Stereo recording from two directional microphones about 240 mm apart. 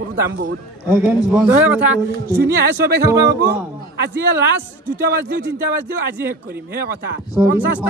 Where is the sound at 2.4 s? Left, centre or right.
Right.